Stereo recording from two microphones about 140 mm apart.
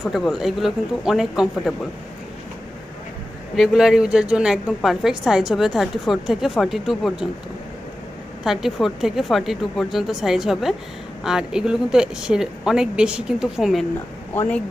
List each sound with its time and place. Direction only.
0.0 s a woman's voice: 5° right (ahead or behind)
3.5 s a woman's voice: centre (ahead or behind)
8.4 s a woman's voice: 5° right (ahead or behind)
14.3 s speech: 10° left (ahead or behind)